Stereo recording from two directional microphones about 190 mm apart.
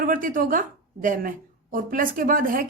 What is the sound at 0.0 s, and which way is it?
A woman's voice, 45° right (ahead or behind).